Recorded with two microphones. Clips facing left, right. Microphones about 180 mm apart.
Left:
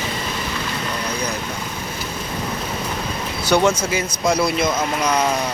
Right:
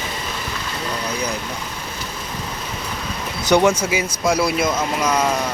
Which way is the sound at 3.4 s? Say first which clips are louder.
Right 2 dB; 15° right (ahead or behind).